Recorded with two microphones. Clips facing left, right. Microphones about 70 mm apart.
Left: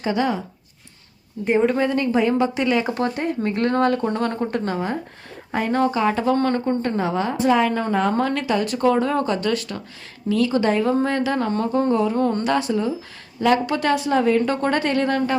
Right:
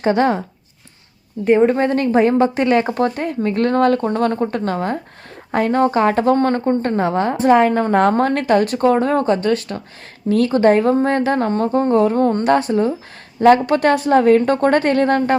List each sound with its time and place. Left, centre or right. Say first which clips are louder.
0.0 s a woman's voice: right 6 dB; right
1.6 s a woman's voice: right 4 dB; right